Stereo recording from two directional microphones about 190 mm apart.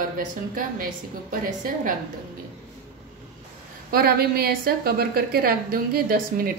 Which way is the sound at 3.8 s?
55° right (ahead or behind).